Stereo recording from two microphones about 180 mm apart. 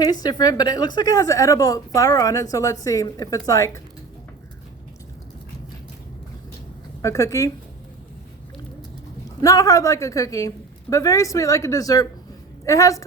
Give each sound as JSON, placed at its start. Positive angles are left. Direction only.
{"t": 0.0, "sound": "a woman's voice", "side_deg": 20}
{"t": 7.0, "sound": "a woman's voice", "side_deg": 20}
{"t": 9.4, "sound": "speech", "side_deg": 20}